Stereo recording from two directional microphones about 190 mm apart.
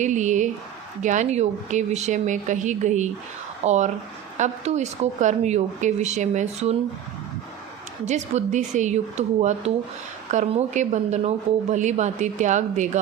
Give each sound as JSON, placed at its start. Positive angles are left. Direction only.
{"t": 0.0, "sound": "a woman's voice", "side_deg": -40}
{"t": 8.0, "sound": "a woman's voice", "side_deg": -40}